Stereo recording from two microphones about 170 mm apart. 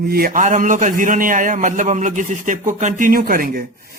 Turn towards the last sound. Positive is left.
turn(degrees=-60)  # may be behind; listen again after turning